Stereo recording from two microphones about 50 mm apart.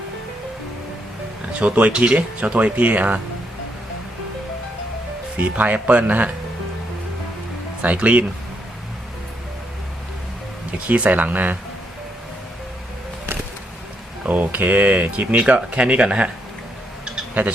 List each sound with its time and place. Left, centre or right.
1.5 s speech: right
5.4 s speech: right
7.8 s speech: right
10.8 s speech: right
14.3 s speech: right
17.4 s speech: right